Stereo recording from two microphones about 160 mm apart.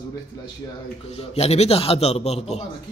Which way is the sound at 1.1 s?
40° left (ahead or behind).